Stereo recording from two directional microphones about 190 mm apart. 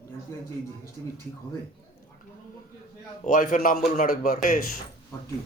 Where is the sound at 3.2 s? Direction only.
45° left (ahead or behind).